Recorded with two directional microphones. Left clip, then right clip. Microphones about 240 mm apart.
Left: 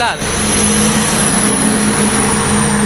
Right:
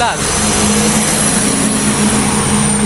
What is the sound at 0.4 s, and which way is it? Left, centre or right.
Vehicle, right.